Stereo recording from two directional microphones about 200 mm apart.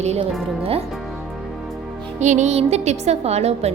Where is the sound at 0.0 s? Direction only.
35° right (ahead or behind).